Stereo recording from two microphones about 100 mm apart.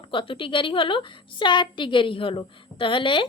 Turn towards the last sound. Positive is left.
turn(degrees=55)  # may be behind; listen again after turning